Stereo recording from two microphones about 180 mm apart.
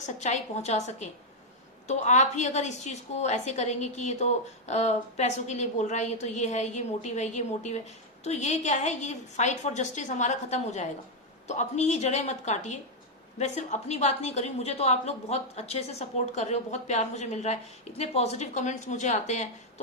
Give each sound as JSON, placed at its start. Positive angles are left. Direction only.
{"t": 0.0, "sound": "a woman's voice", "side_deg": 40}